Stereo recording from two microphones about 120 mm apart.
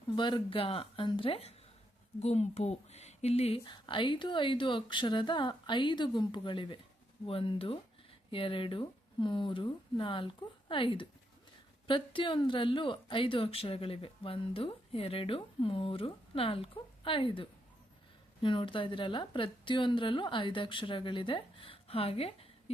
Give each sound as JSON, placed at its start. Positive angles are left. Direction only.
{"t": 0.2, "sound": "speech", "side_deg": 40}
{"t": 2.1, "sound": "speech", "side_deg": 65}
{"t": 3.6, "sound": "speech", "side_deg": 40}